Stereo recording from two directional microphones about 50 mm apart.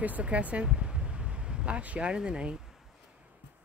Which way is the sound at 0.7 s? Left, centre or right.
Centre.